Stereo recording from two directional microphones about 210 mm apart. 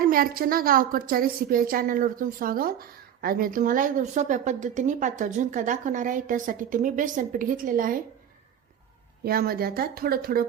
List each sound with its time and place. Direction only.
0.0 s a woman's voice: 45° right (ahead or behind)
9.2 s speech: 45° right (ahead or behind)